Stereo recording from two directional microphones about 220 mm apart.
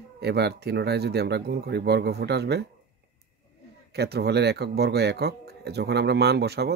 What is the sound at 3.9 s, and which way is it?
Speech, 50° right (ahead or behind).